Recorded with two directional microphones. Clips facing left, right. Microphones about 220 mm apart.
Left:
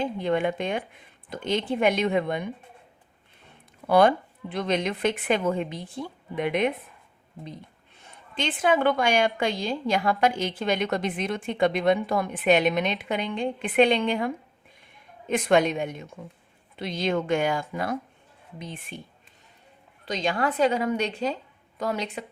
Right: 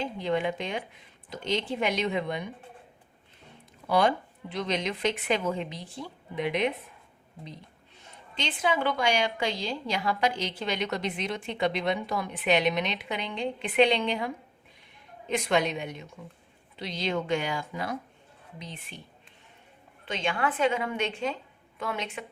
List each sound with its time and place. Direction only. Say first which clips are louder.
0.0 s a woman's voice: left 4 dB; 55° left (ahead or behind)
3.8 s a woman's voice: left 5 dB; 55° left (ahead or behind)
8.4 s a woman's voice: left 5 dB; 50° left (ahead or behind)
20.1 s a woman's voice: left 3 dB; 40° left (ahead or behind)